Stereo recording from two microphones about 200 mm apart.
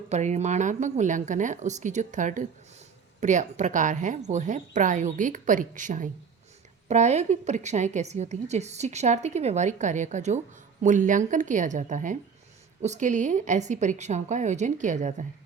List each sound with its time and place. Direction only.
0.1 s a woman's voice: 35° right (ahead or behind)